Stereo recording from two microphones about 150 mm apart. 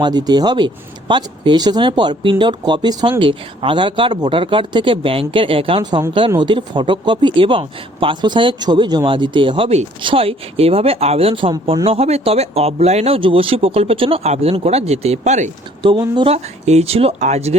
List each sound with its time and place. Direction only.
0.0 s speech: 25° right (ahead or behind); by 15.4 s 50° right (ahead or behind)
15.8 s speech: 30° right (ahead or behind)
16.3 s speech: 45° right (ahead or behind)